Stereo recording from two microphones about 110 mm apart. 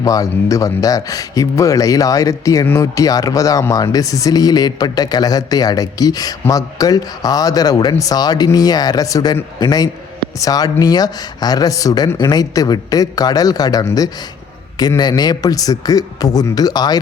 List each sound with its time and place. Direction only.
0.0 s speech: 30° left (ahead or behind)